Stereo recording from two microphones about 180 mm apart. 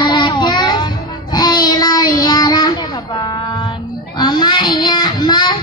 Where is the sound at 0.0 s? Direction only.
25° left (ahead or behind).